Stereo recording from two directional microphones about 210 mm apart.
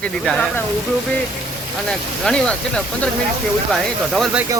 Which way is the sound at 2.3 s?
5° left (ahead or behind).